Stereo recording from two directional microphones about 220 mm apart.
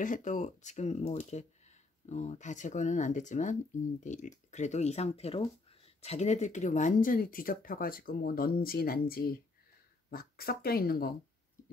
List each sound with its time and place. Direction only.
0.0 s speech: 35° left (ahead or behind)